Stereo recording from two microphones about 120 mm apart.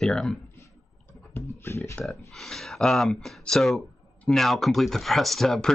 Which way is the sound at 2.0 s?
Centre (ahead or behind).